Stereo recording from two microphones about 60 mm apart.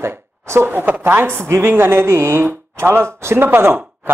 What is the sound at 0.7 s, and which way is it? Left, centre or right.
Speech, right.